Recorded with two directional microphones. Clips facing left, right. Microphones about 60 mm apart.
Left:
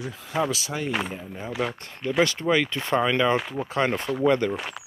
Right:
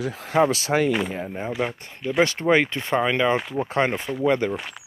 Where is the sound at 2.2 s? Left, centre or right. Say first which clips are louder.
Right 3 dB; right.